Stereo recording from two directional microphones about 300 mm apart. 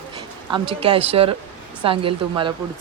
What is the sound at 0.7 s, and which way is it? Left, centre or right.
Speech, centre.